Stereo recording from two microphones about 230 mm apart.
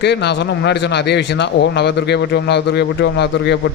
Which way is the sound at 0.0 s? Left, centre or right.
Left.